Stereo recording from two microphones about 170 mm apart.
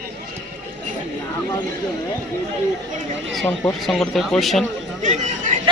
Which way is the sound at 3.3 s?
Centre (ahead or behind).